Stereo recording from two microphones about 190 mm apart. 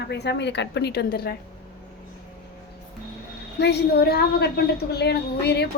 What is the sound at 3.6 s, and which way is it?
A woman's voice, 60° left (ahead or behind).